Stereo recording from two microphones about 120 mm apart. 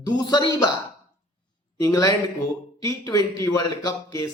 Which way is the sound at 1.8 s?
30° left (ahead or behind).